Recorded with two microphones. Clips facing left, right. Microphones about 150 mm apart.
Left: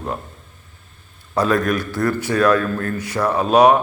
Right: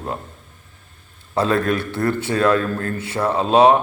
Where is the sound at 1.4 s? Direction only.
30° right (ahead or behind).